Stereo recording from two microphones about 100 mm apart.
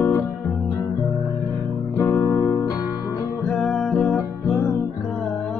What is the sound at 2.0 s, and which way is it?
Guitar, 35° left (ahead or behind).